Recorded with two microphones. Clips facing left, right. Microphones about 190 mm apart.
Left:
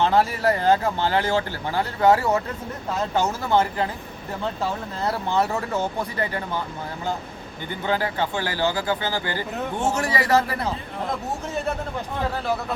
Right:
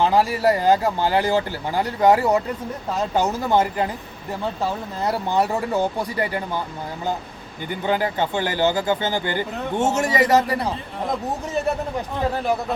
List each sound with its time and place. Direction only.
0.0 s speech: 10° right (ahead or behind)
5.0 s speech: 15° right (ahead or behind)
7.9 s speech: 15° right (ahead or behind)